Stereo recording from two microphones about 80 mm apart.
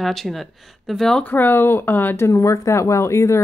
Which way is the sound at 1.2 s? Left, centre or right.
Left.